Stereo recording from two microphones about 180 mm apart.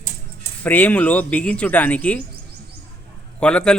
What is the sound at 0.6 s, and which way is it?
Speech, 10° left (ahead or behind).